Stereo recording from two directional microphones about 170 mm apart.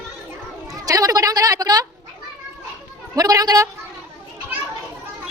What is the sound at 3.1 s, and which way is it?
Speech, 20° right (ahead or behind).